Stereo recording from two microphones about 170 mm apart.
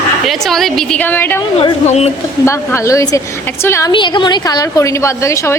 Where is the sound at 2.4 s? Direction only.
15° left (ahead or behind).